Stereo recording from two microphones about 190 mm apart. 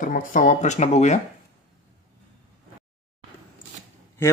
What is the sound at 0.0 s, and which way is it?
Speech, 45° left (ahead or behind).